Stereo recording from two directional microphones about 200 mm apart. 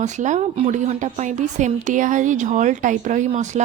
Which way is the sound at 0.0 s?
35° right (ahead or behind).